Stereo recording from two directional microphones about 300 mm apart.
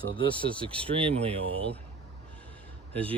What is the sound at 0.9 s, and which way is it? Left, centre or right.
Speech, centre.